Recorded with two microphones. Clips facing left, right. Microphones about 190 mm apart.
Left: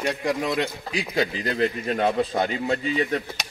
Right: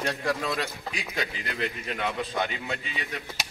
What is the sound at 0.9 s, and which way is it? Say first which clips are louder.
A man's voice: left 8 dB; 35° left (ahead or behind).